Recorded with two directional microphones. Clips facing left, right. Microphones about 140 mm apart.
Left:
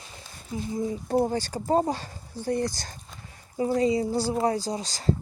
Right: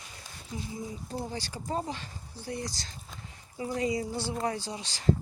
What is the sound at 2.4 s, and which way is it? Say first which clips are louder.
Speech: left 10 dB; 50° left (ahead or behind).